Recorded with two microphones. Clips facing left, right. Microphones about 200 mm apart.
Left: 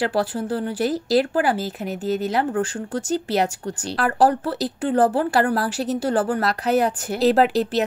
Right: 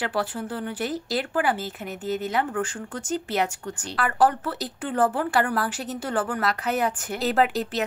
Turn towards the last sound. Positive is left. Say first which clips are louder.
# left 5 dB
turn(degrees=35)  # may be behind; listen again after turning